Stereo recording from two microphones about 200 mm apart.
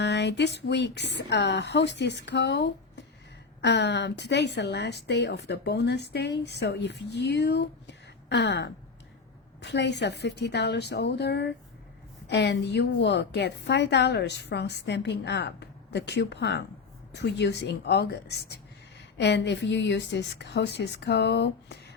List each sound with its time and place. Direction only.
0.0 s a woman's voice: 60° left (ahead or behind)